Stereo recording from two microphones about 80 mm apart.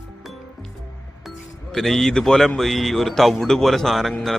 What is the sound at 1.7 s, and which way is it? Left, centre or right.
Speech, centre.